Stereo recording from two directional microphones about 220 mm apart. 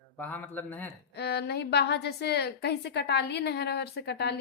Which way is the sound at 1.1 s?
50° left (ahead or behind).